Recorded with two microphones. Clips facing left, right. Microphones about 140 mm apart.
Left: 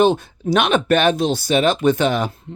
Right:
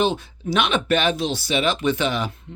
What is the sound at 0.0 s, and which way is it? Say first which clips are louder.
Speech: left 6 dB; 50° left (ahead or behind).